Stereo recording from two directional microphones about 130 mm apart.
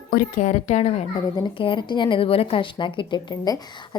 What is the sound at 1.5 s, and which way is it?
A woman's voice, 40° left (ahead or behind).